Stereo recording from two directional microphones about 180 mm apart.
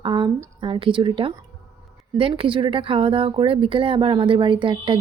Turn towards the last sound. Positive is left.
turn(degrees=-30)  # may be behind; listen again after turning